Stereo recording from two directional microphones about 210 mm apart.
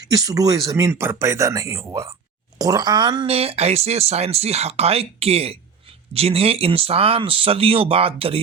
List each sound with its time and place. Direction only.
0.1 s speech: 15° right (ahead or behind)